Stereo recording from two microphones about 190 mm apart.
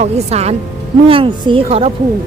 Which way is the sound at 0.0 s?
35° right (ahead or behind).